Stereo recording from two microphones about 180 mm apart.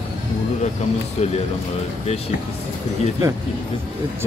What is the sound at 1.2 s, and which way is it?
Speech, 40° left (ahead or behind).